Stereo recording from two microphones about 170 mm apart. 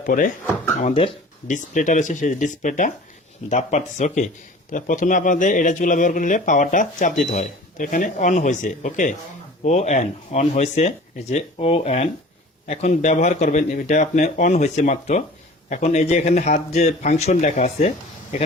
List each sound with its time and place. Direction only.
0.0 s speech: 50° left (ahead or behind)
0.8 s speech: 35° left (ahead or behind)
1.5 s speech: 50° left (ahead or behind)